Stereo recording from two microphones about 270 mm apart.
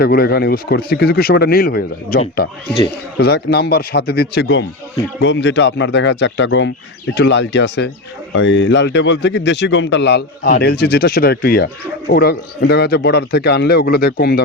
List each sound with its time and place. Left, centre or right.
0.0 s speech: left